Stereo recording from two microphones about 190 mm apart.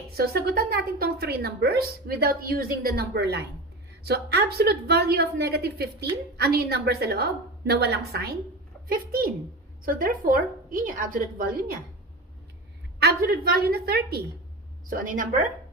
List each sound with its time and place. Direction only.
0.2 s a woman's voice: 55° right (ahead or behind)
13.0 s a woman's voice: 55° right (ahead or behind)
14.8 s a woman's voice: 45° right (ahead or behind)